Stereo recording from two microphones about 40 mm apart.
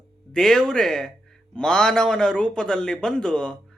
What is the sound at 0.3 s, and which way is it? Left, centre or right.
Speech, centre.